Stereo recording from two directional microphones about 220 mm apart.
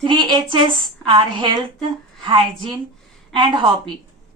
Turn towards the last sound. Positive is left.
turn(degrees=-20)  # may be behind; listen again after turning